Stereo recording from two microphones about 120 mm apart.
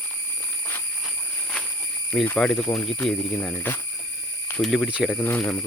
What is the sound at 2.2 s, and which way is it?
Speech, 10° left (ahead or behind).